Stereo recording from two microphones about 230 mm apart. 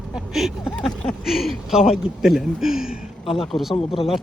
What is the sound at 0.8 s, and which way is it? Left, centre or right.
Speech, centre.